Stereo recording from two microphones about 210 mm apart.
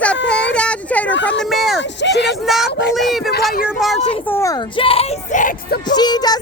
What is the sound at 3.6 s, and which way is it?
Speech, centre (ahead or behind).